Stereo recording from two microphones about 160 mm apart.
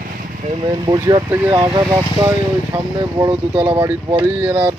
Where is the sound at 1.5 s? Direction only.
25° right (ahead or behind).